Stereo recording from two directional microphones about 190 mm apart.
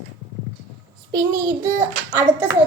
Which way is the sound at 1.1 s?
20° right (ahead or behind).